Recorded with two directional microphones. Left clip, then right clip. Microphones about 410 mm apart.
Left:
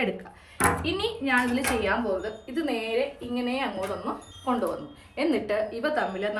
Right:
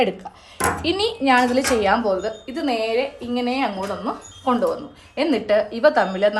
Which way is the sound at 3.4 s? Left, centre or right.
Right.